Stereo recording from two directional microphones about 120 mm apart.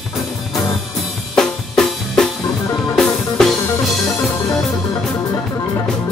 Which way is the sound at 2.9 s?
5° left (ahead or behind).